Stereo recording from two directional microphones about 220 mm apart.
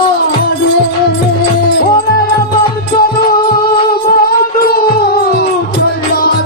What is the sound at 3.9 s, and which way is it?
Music, 45° left (ahead or behind).